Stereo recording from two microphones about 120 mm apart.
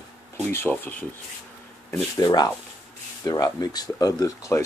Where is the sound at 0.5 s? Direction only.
15° left (ahead or behind).